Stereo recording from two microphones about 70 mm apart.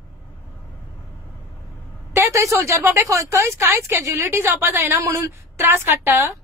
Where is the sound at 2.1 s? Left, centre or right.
Right.